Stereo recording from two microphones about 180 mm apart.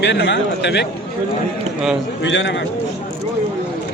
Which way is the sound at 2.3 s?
90° left.